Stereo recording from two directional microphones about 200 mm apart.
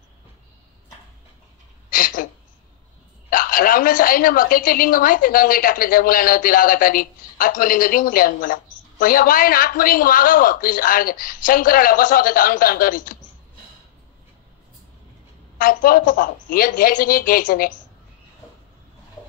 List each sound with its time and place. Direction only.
1.9 s a sound: 45° left (ahead or behind)
3.3 s a woman's voice: 45° left (ahead or behind)
15.5 s a woman's voice: 45° left (ahead or behind)